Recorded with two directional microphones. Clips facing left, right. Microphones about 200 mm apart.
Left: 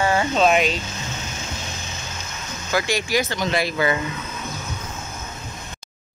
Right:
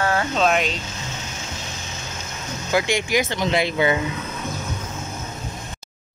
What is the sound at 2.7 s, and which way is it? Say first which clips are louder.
Speech: right 1 dB; 20° right (ahead or behind).